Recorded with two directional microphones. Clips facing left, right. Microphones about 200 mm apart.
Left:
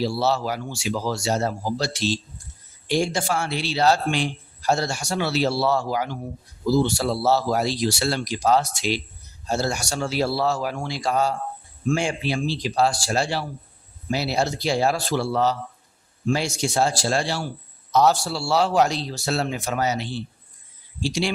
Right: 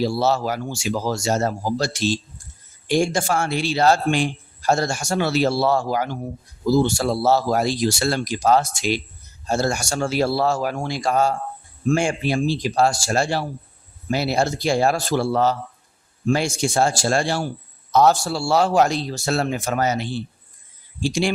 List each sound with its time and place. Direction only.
0.0 s speech: 45° right (ahead or behind)